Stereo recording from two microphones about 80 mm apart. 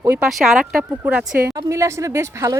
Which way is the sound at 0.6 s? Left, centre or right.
Centre.